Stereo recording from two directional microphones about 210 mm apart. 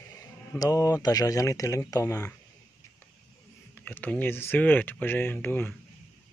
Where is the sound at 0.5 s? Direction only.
15° left (ahead or behind).